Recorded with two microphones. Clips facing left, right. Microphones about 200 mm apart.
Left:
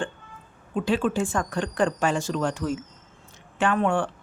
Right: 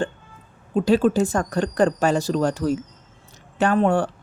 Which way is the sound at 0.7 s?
40° right (ahead or behind).